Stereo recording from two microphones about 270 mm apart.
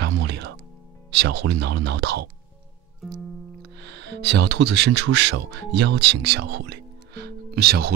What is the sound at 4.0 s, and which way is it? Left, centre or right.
Speech, right.